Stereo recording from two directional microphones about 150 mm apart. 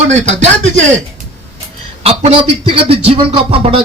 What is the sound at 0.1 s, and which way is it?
Speech, 50° right (ahead or behind).